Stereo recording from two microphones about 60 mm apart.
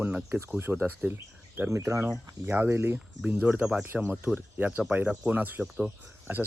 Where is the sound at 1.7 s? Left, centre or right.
Right.